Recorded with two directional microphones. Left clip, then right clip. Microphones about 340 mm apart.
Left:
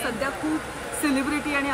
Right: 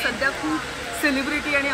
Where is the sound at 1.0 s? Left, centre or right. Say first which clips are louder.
Right 2 dB; centre.